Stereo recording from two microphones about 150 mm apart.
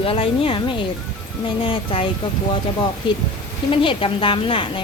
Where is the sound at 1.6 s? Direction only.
35° left (ahead or behind).